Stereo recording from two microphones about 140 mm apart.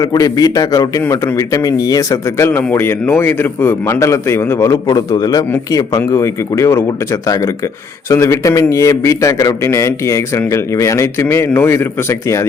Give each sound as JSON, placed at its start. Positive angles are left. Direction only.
{"t": 0.0, "sound": "speech", "side_deg": 25}